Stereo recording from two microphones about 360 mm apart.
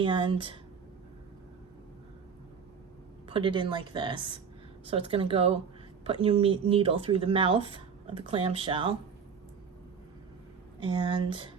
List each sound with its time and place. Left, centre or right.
0.0 s speech: centre
3.2 s speech: centre
10.8 s speech: centre